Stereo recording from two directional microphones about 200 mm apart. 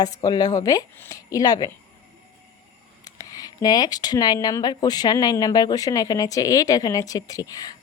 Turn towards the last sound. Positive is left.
turn(degrees=20)  # may be behind; listen again after turning